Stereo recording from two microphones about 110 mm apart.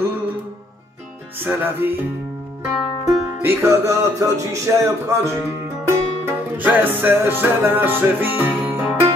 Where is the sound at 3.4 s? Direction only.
25° right (ahead or behind).